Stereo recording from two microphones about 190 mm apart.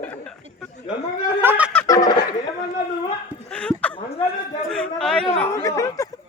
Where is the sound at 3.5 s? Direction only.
5° left (ahead or behind).